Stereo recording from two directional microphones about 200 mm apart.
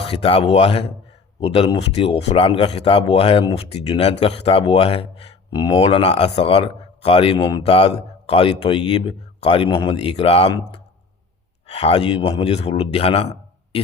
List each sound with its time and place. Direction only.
0.0 s speech: 30° left (ahead or behind)